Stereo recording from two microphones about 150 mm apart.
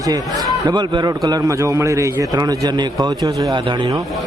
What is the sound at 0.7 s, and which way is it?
A man's voice, 30° right (ahead or behind).